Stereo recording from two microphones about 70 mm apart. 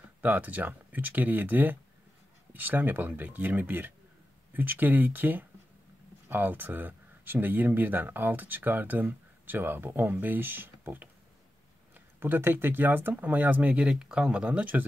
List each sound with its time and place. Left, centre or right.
0.2 s speech: right
12.2 s speech: right